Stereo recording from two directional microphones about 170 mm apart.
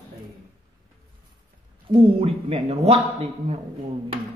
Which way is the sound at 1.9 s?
35° right (ahead or behind).